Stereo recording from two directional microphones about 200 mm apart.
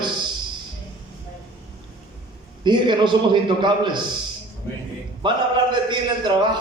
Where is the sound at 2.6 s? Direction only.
25° right (ahead or behind).